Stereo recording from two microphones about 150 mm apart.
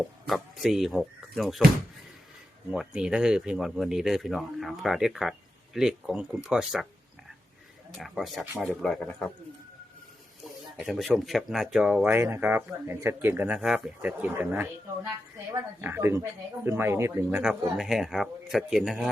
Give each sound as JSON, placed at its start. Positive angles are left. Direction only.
{"t": 0.3, "sound": "speech", "side_deg": 0}
{"t": 2.7, "sound": "speech", "side_deg": -5}
{"t": 7.9, "sound": "speech", "side_deg": 0}
{"t": 8.5, "sound": "speech", "side_deg": -10}
{"t": 8.8, "sound": "speech", "side_deg": 5}
{"t": 10.8, "sound": "speech", "side_deg": 0}
{"t": 17.3, "sound": "speech", "side_deg": -5}